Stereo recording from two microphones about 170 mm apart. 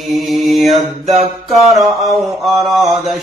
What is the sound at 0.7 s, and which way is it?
Mantra, 40° right (ahead or behind).